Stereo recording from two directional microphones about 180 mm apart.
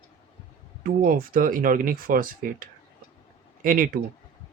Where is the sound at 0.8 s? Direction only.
50° right (ahead or behind).